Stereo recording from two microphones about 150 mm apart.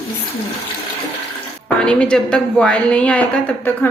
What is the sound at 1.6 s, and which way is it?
A woman's voice, 5° left (ahead or behind).